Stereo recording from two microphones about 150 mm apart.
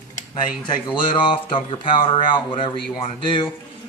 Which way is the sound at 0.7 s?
30° left (ahead or behind).